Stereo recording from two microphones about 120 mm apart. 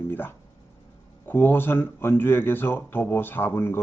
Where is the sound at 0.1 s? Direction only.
20° left (ahead or behind).